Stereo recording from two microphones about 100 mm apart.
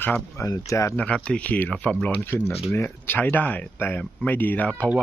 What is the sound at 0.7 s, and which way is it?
Speech, 30° left (ahead or behind).